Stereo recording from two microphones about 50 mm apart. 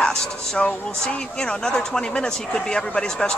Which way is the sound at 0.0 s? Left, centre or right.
Centre.